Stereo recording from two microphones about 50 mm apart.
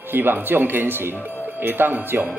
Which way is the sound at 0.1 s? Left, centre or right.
Right.